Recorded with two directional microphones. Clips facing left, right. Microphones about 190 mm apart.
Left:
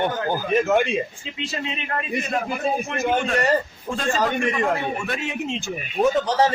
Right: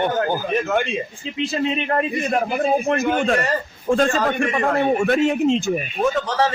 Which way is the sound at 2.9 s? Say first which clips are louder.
Right 3 dB; 45° right (ahead or behind).